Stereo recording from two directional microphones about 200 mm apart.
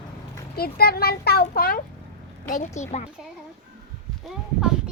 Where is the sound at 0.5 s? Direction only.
50° left (ahead or behind).